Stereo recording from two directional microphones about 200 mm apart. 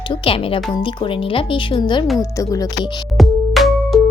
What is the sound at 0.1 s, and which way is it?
Speech, 25° left (ahead or behind).